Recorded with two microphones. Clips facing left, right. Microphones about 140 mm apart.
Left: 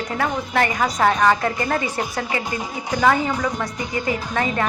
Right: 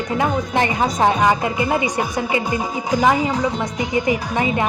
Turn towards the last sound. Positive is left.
turn(degrees=-15)  # may be behind; listen again after turning